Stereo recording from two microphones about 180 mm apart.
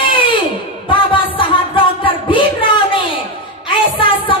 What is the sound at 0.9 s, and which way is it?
Music, 30° left (ahead or behind).